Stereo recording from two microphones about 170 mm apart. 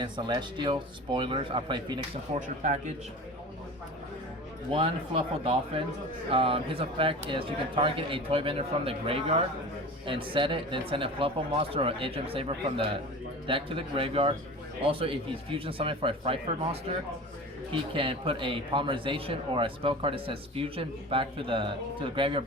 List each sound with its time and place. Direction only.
0.0 s speech: 25° right (ahead or behind)
4.7 s speech: 30° right (ahead or behind)
10.2 s speech: 30° right (ahead or behind)
17.7 s speech: 30° right (ahead or behind)